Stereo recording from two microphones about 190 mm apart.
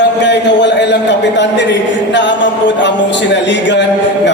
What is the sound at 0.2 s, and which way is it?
A man's voice, 65° left (ahead or behind).